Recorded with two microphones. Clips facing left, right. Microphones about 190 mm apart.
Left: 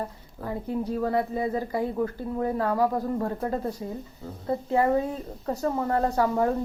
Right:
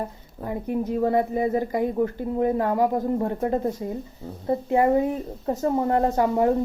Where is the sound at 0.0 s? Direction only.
20° right (ahead or behind).